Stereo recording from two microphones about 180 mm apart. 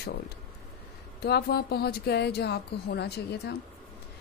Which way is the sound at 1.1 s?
65° left (ahead or behind).